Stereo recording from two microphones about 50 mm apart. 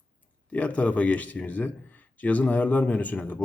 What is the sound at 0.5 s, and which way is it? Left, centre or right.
Speech, left.